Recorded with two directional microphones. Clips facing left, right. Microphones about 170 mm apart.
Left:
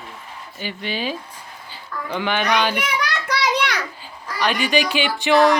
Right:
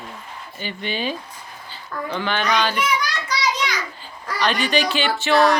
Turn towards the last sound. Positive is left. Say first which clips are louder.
# left 1 dB
turn(degrees=15)  # may be behind; listen again after turning